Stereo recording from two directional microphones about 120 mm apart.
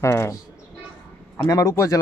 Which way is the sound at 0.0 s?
20° left (ahead or behind).